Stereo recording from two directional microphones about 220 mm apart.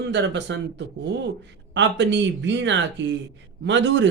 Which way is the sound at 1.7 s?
55° right (ahead or behind).